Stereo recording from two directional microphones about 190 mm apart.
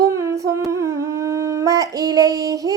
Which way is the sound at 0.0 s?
15° right (ahead or behind).